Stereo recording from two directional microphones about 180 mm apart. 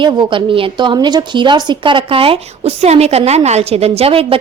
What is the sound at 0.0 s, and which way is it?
Speech, 25° right (ahead or behind).